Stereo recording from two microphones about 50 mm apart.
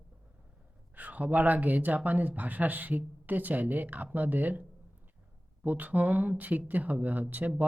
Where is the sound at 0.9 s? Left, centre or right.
Right.